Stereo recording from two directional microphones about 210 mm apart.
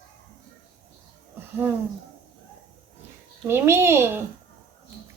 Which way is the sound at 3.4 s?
10° right (ahead or behind).